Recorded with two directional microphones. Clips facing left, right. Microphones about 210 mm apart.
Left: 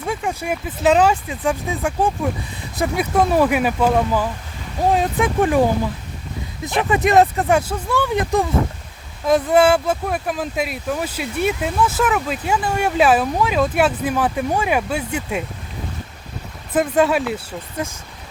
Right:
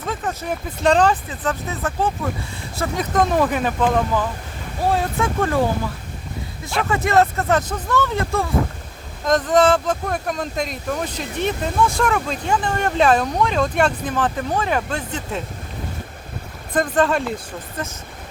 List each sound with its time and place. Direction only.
0.0 s speech: 10° left (ahead or behind)
16.7 s speech: 10° left (ahead or behind)